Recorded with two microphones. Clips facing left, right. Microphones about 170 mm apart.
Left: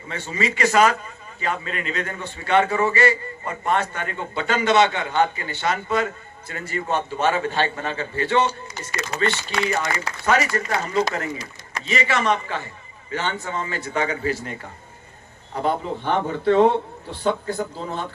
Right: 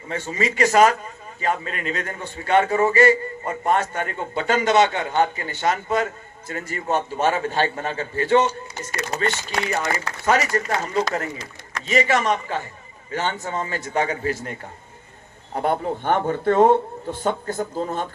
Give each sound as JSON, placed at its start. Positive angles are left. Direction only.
{"t": 0.1, "sound": "a man's voice", "side_deg": -45}
{"t": 15.6, "sound": "a man's voice", "side_deg": -50}